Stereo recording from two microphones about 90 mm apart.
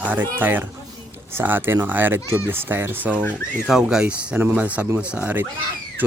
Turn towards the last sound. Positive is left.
turn(degrees=-15)  # may be behind; listen again after turning